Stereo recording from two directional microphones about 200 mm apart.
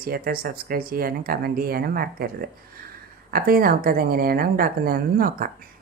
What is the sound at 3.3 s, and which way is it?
A woman's voice, 45° right (ahead or behind).